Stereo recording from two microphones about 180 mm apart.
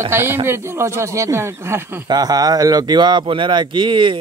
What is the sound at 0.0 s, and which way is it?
Speech, 15° right (ahead or behind).